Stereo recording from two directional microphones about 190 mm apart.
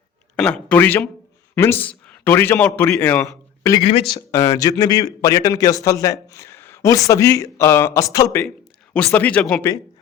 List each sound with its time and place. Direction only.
0.3 s a man's voice: 5° left (ahead or behind)